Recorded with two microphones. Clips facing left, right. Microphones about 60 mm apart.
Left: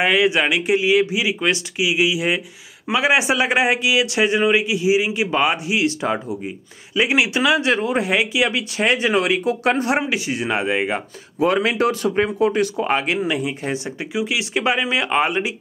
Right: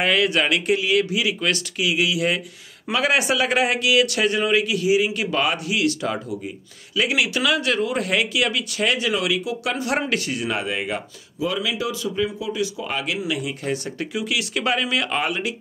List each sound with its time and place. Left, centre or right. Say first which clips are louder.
0.0 s a man's voice: left 3 dB; centre; by 9.9 s left
9.9 s a man's voice: left 2 dB; centre
11.3 s speech: left 7 dB; left